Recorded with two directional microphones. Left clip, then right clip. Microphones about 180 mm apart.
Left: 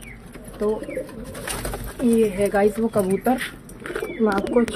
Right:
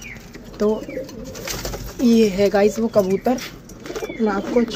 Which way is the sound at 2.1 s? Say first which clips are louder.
Right 3 dB; 20° right (ahead or behind).